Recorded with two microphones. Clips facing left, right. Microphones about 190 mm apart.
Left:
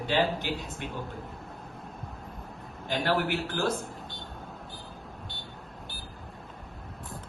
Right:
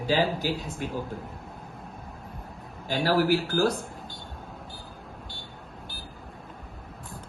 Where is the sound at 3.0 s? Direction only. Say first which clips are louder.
Right 6 dB; 35° right (ahead or behind).